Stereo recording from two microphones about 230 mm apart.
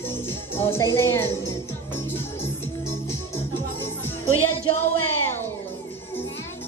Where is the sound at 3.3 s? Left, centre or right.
Centre.